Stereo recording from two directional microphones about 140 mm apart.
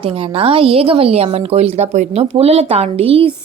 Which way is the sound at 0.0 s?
40° right (ahead or behind).